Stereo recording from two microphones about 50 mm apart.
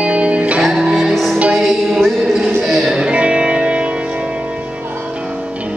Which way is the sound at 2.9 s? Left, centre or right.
Right.